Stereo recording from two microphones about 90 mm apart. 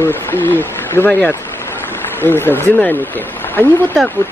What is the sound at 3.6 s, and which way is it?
Speech, 25° left (ahead or behind).